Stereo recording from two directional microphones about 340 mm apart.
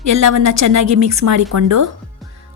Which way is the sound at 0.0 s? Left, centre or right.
Right.